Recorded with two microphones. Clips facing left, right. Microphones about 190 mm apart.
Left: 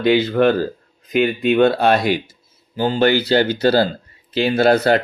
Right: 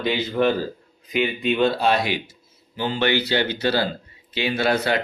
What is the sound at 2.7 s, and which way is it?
Speech, 40° left (ahead or behind).